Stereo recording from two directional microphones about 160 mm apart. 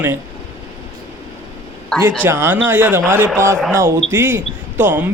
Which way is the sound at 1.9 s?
5° left (ahead or behind).